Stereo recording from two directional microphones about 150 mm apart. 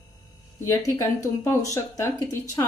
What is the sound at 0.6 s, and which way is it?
Speech, 15° left (ahead or behind).